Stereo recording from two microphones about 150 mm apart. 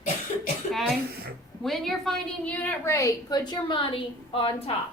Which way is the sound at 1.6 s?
Centre (ahead or behind).